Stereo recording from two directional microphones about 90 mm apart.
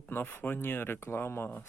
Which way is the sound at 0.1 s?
20° left (ahead or behind).